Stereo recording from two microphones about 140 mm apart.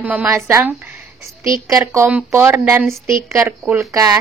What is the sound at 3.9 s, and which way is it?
Speech, 25° right (ahead or behind).